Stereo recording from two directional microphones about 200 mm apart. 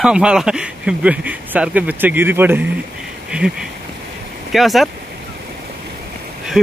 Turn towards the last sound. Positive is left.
turn(degrees=-5)  # may be behind; listen again after turning